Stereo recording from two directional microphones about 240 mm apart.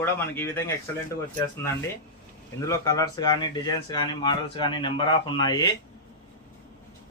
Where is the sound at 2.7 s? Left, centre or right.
Centre.